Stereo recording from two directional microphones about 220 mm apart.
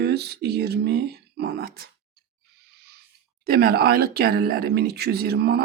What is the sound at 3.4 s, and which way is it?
Speech, 45° right (ahead or behind).